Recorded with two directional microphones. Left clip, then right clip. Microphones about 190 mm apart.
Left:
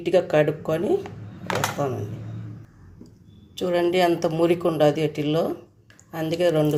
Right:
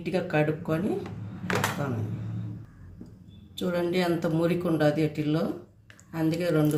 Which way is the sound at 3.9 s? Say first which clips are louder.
Left 6 dB; 40° left (ahead or behind).